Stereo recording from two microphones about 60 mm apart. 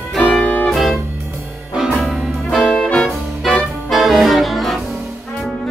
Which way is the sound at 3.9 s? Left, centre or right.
Centre.